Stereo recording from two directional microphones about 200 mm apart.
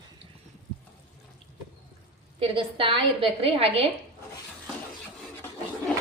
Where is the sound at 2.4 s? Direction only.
25° right (ahead or behind).